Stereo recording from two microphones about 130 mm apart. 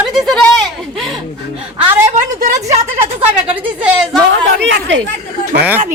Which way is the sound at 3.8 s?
10° right (ahead or behind).